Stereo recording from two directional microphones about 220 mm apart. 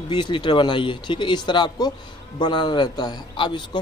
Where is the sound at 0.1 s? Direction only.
20° left (ahead or behind).